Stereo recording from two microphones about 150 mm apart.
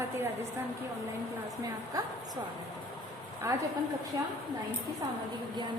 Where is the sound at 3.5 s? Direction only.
20° right (ahead or behind).